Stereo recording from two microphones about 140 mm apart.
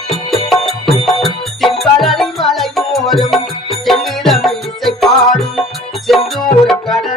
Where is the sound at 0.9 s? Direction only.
40° left (ahead or behind).